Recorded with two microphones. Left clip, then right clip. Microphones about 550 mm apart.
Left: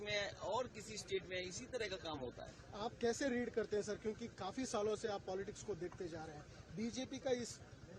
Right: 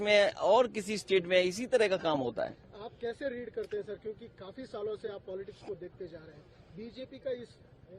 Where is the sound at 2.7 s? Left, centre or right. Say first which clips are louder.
Even; centre.